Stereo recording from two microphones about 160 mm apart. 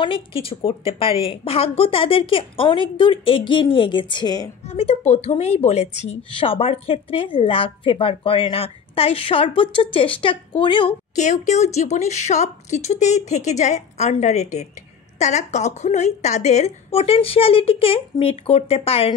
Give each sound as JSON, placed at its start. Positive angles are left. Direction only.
{"t": 0.0, "sound": "a woman's voice", "side_deg": 35}
{"t": 4.6, "sound": "a woman's voice", "side_deg": 40}
{"t": 11.1, "sound": "a woman's voice", "side_deg": 50}